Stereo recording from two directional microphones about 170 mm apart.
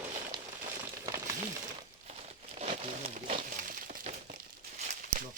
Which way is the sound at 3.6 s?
55° right (ahead or behind).